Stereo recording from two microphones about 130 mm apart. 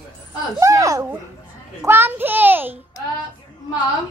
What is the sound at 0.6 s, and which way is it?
A woman's voice, 25° right (ahead or behind).